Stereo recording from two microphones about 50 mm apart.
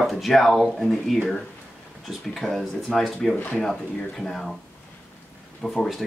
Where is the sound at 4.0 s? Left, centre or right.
Centre.